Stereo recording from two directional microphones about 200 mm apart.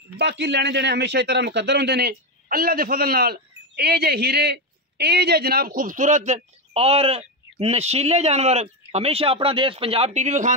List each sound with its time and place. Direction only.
0.2 s a man's voice: 60° right (ahead or behind); by 10.5 s 35° right (ahead or behind)